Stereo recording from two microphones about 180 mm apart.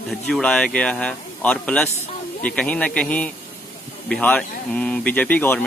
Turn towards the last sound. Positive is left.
turn(degrees=10)  # may be behind; listen again after turning